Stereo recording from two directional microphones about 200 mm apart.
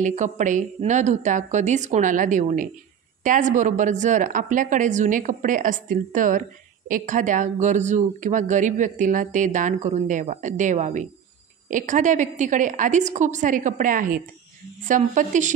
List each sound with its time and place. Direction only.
0.0 s speech: 40° right (ahead or behind)